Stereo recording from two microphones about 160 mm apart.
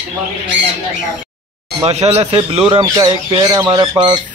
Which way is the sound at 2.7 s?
30° right (ahead or behind).